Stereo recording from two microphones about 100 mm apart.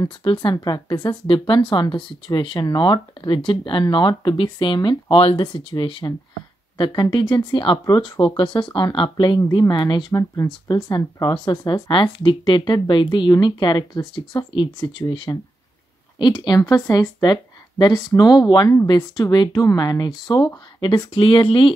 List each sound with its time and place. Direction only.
0.2 s speech: 55° left (ahead or behind)
0.6 s speech: 45° left (ahead or behind)
5.1 s speech: 65° left (ahead or behind)
9.4 s speech: 45° left (ahead or behind)
10.1 s speech: 30° left (ahead or behind)
10.7 s speech: 45° left (ahead or behind)
15.3 s speech: 40° left (ahead or behind)
16.2 s speech: 50° left (ahead or behind)